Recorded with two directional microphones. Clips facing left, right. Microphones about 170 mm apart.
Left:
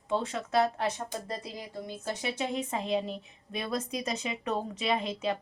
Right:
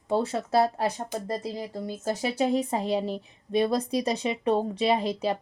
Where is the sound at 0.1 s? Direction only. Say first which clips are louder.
Right 5 dB; 35° right (ahead or behind).